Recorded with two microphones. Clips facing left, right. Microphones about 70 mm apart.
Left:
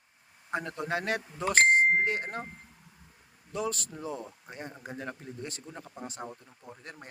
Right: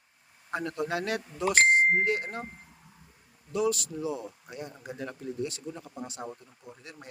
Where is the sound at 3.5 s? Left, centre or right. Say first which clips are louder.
Right 5 dB; left.